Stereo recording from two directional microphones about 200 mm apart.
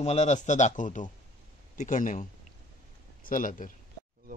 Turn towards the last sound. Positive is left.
turn(degrees=40)  # may be behind; listen again after turning